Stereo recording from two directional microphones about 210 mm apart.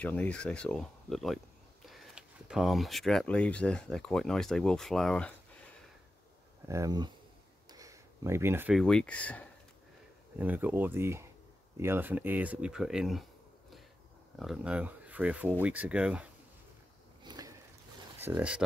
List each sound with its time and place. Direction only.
0.0 s speech: 5° left (ahead or behind)
6.7 s speech: 15° right (ahead or behind)
7.7 s a sound: 15° right (ahead or behind)
8.7 s speech: 5° left (ahead or behind)
10.3 s speech: 10° right (ahead or behind)
17.2 s a sound: 20° right (ahead or behind)
18.2 s speech: 5° right (ahead or behind)